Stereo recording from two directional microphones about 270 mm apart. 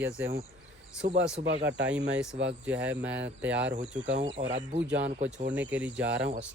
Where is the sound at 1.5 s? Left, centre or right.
Right.